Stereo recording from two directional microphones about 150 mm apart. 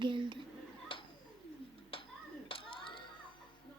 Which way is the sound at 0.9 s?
35° left (ahead or behind).